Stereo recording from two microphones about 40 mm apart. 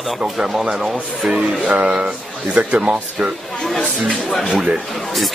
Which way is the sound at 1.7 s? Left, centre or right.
Right.